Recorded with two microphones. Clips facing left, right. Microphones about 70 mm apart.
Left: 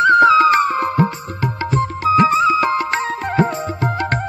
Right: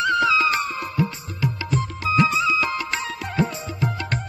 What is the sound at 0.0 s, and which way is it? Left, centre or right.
Music, left.